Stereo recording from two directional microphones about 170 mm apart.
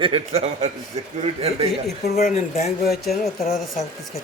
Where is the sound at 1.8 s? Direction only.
65° left (ahead or behind).